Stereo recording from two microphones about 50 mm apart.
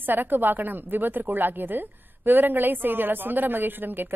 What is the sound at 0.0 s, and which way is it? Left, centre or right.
Speech, right.